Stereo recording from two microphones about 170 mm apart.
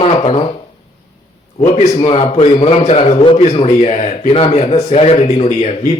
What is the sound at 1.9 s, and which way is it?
A man's voice, 35° left (ahead or behind).